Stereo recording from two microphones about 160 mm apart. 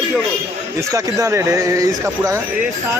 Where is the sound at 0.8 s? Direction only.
20° right (ahead or behind).